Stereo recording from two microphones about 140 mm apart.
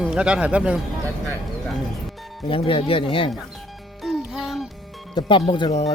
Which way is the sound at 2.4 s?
40° left (ahead or behind).